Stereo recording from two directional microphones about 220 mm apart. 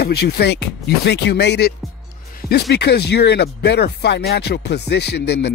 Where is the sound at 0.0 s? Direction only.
45° left (ahead or behind).